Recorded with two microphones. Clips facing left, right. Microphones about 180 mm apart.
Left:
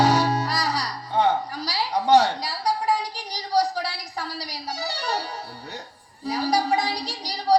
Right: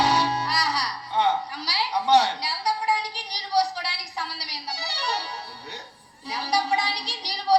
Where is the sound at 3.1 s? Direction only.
45° left (ahead or behind).